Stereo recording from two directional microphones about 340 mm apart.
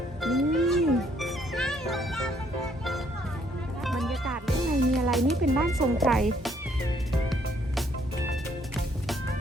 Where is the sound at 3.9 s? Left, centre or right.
Centre.